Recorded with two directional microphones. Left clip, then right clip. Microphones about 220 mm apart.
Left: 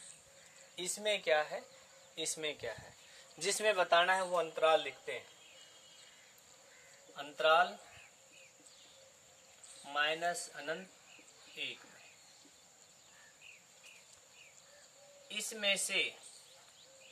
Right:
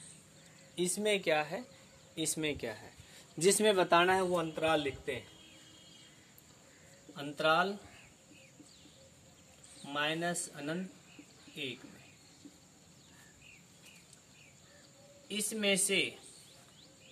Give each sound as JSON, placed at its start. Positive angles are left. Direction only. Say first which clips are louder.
{"t": 0.7, "sound": "speech", "louder": "right 4 dB", "side_deg": -25}
{"t": 4.0, "sound": "speech", "louder": "right 2 dB", "side_deg": -15}
{"t": 7.2, "sound": "speech", "louder": "left 1 dB", "side_deg": -20}
{"t": 9.8, "sound": "speech", "louder": "even", "side_deg": -15}
{"t": 15.3, "sound": "speech", "louder": "right 2 dB", "side_deg": -15}